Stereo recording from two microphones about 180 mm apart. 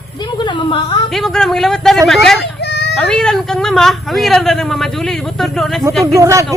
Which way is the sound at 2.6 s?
70° left (ahead or behind).